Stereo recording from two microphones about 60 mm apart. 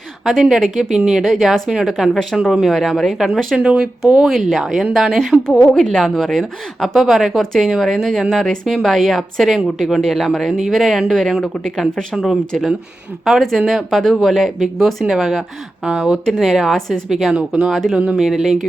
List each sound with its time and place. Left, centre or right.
0.3 s speech: centre
3.6 s speech: centre
4.0 s speech: centre
5.4 s a woman's voice: centre
13.9 s speech: centre
15.8 s speech: centre
16.4 s speech: centre
17.3 s speech: centre
17.7 s speech: centre
17.9 s speech: right
18.2 s speech: centre